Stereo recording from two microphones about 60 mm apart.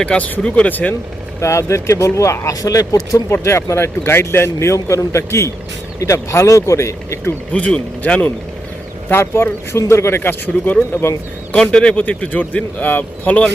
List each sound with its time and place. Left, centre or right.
0.0 s speech: centre
1.4 s speech: left
3.4 s a man's voice: left
7.5 s speech: left
9.0 s a man's voice: left
11.5 s speech: centre
11.9 s speech: left